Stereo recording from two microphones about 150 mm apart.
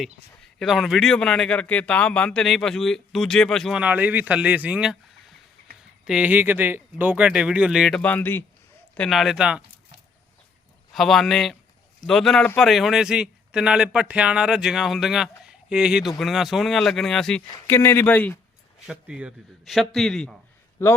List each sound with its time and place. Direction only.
0.6 s speech: centre (ahead or behind)
6.1 s speech: 10° right (ahead or behind); by 8.4 s 15° left (ahead or behind)
9.0 s speech: centre (ahead or behind)
10.9 s speech: centre (ahead or behind)
17.7 s speech: 15° left (ahead or behind)
18.9 s speech: 5° right (ahead or behind)
20.8 s speech: 20° left (ahead or behind)